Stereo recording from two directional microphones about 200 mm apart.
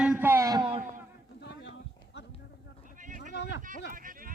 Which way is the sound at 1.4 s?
60° left (ahead or behind).